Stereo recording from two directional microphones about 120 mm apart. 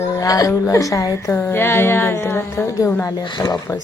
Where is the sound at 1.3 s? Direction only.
15° left (ahead or behind).